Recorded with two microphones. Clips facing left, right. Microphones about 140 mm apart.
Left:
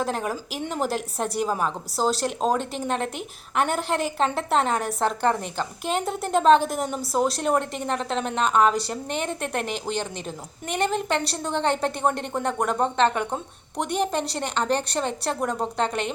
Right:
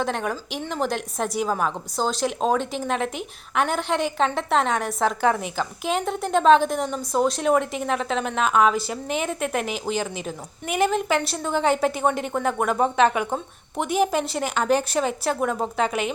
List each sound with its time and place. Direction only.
0.0 s a woman's voice: 5° left (ahead or behind)